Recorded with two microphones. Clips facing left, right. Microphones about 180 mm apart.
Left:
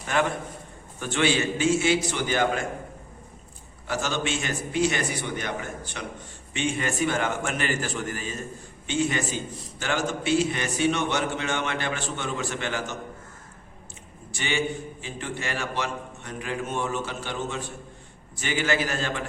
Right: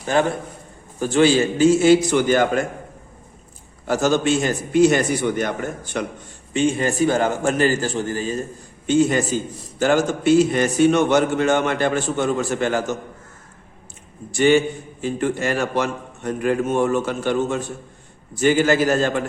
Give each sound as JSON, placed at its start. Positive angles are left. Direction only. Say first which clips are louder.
{"t": 0.0, "sound": "a man's voice", "louder": "right 6 dB", "side_deg": -35}
{"t": 3.8, "sound": "a man's voice", "louder": "right 10 dB", "side_deg": -45}
{"t": 6.5, "sound": "a man's voice", "louder": "right 8 dB", "side_deg": -35}
{"t": 14.3, "sound": "a man's voice", "louder": "right 12 dB", "side_deg": -45}